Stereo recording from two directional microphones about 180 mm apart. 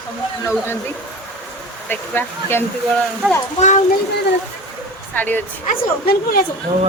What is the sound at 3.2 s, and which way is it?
Speech, 10° right (ahead or behind).